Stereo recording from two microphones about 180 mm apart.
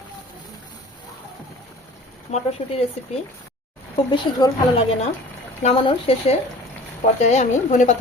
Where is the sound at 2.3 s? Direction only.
35° left (ahead or behind).